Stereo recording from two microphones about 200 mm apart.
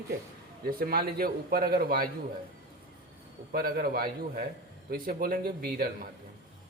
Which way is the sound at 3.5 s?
50° right (ahead or behind).